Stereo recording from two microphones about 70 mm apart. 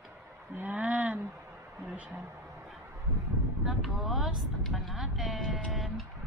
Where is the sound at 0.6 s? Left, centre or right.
Right.